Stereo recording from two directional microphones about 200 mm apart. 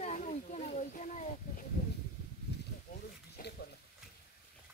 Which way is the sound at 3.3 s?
55° left (ahead or behind).